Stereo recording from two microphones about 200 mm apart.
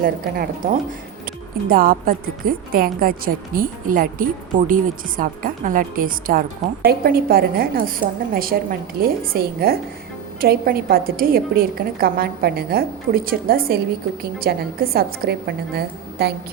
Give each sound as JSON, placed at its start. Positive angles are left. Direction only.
{"t": 0.0, "sound": "a woman's voice", "side_deg": -45}